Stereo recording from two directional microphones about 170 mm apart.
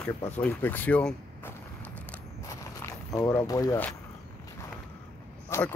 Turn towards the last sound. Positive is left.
turn(degrees=15)  # may be behind; listen again after turning